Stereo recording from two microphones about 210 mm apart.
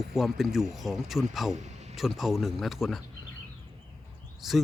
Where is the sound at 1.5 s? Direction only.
35° right (ahead or behind).